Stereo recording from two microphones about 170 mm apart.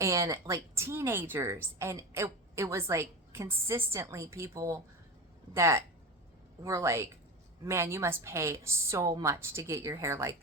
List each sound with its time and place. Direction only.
0.0 s a woman's voice: 20° right (ahead or behind)